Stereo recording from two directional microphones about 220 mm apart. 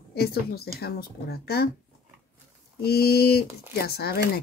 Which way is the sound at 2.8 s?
45° left (ahead or behind).